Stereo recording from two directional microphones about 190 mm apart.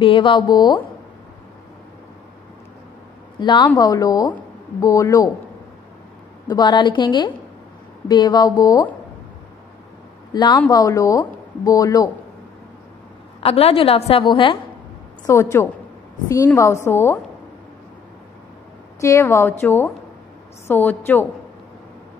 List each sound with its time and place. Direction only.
0.0 s speech: 30° left (ahead or behind)
3.3 s speech: 25° left (ahead or behind)
6.4 s speech: 20° left (ahead or behind)
10.3 s speech: 25° left (ahead or behind)
13.4 s a woman's voice: 30° left (ahead or behind)
15.2 s a woman's voice: 15° left (ahead or behind)
18.9 s a woman's voice: 15° left (ahead or behind)